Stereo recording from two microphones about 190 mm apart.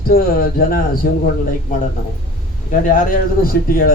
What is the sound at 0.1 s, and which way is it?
Speech, 50° left (ahead or behind).